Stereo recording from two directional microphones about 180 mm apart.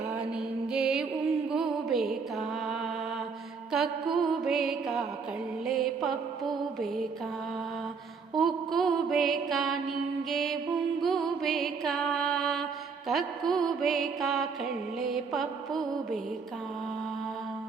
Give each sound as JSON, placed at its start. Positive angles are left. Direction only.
{"t": 0.2, "sound": "music", "side_deg": -5}
{"t": 8.4, "sound": "mantra", "side_deg": 0}
{"t": 10.2, "sound": "music", "side_deg": 0}